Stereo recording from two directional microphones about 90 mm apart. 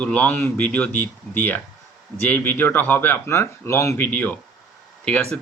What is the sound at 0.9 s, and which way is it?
Speech, 25° left (ahead or behind).